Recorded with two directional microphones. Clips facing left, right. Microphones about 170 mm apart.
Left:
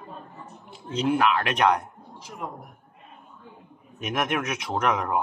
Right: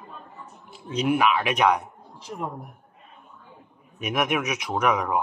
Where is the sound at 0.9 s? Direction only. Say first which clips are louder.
Right 1 dB; 10° right (ahead or behind).